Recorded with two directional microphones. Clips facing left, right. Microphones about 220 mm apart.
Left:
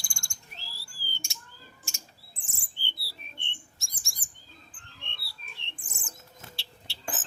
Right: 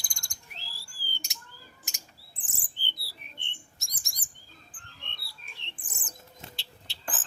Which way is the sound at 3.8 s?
20° right (ahead or behind).